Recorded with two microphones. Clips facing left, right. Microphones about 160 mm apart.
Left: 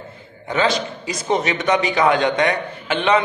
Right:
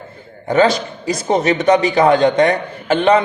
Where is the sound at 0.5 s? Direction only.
40° right (ahead or behind).